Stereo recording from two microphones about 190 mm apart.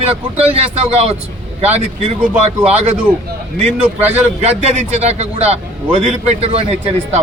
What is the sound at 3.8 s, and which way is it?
Speech, 10° right (ahead or behind).